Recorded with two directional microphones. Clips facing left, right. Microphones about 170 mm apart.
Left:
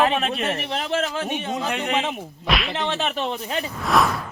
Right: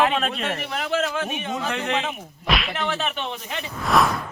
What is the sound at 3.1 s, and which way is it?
Speech, 35° left (ahead or behind).